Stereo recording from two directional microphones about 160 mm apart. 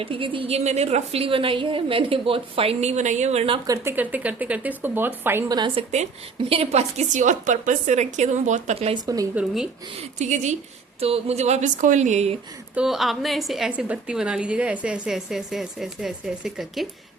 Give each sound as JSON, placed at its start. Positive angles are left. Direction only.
{"t": 0.0, "sound": "a woman's voice", "side_deg": -35}
{"t": 3.7, "sound": "speech", "side_deg": -15}
{"t": 5.5, "sound": "a woman's voice", "side_deg": -30}
{"t": 6.5, "sound": "a woman's voice", "side_deg": -40}
{"t": 9.3, "sound": "a woman's voice", "side_deg": -5}
{"t": 10.0, "sound": "a woman's voice", "side_deg": -50}
{"t": 12.7, "sound": "a woman's voice", "side_deg": -5}